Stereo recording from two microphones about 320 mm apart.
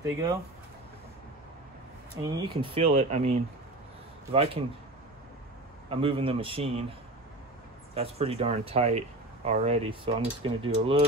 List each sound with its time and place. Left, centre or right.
0.0 s speech: centre
2.2 s speech: centre
5.9 s speech: centre
7.9 s speech: centre